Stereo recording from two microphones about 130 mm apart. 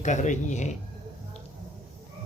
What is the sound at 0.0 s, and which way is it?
Speech, 70° left (ahead or behind).